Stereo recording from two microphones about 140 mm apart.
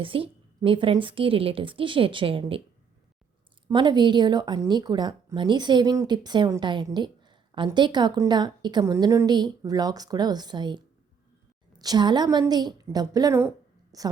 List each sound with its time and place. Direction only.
0.0 s a woman's voice: 40° right (ahead or behind)
3.7 s a woman's voice: 30° right (ahead or behind)